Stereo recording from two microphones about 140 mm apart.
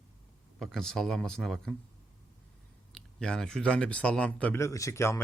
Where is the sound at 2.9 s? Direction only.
5° left (ahead or behind).